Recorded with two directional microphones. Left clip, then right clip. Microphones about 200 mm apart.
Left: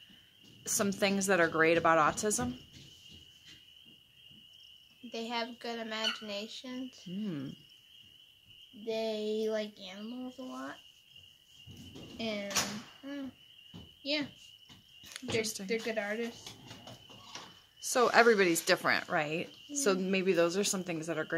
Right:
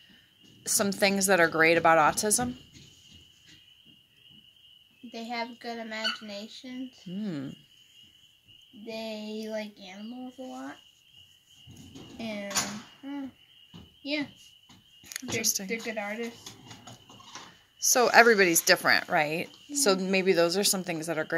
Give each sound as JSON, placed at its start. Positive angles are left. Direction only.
{"t": 0.7, "sound": "a woman's voice", "side_deg": -10}
{"t": 5.1, "sound": "a child's voice", "side_deg": 5}
{"t": 8.8, "sound": "a child's voice", "side_deg": 0}
{"t": 12.2, "sound": "a child's voice", "side_deg": 0}
{"t": 15.1, "sound": "a child's voice", "side_deg": -5}
{"t": 17.9, "sound": "a woman's voice", "side_deg": -10}